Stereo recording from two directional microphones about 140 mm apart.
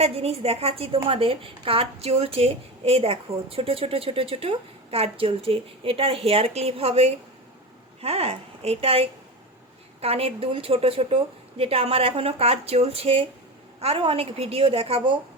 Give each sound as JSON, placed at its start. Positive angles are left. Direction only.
{"t": 0.0, "sound": "speech", "side_deg": -45}